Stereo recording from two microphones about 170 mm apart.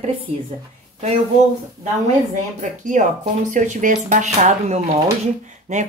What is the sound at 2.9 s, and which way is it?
Speech, 50° right (ahead or behind).